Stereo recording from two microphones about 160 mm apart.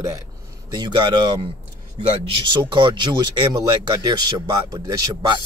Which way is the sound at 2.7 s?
30° right (ahead or behind).